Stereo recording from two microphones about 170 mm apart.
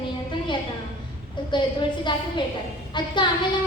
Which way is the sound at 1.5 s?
25° left (ahead or behind).